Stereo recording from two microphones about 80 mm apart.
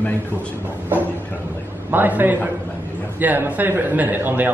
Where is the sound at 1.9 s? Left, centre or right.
Right.